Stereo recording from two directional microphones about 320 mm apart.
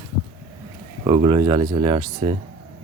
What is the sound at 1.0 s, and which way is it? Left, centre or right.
Speech, centre.